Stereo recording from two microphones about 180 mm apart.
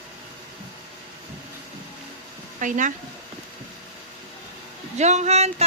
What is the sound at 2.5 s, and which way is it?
Speech, 45° right (ahead or behind).